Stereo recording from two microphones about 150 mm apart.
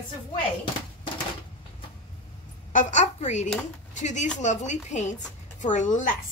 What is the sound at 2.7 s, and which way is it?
Speech, 50° left (ahead or behind).